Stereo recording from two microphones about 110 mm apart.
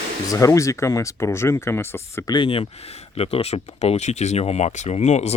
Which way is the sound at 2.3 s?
55° left (ahead or behind).